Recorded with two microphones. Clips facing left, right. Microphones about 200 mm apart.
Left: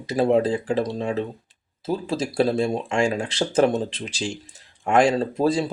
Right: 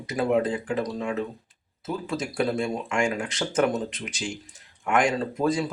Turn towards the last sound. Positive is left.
turn(degrees=30)  # may be behind; listen again after turning